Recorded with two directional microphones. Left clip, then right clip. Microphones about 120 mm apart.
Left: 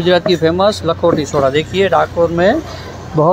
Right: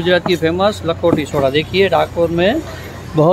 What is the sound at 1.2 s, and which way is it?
Speech, 10° right (ahead or behind).